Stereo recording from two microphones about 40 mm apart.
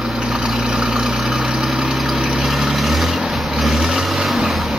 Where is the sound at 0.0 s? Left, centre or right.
Centre.